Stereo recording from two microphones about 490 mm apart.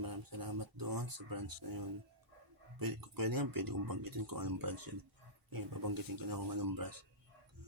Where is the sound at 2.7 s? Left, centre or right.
Right.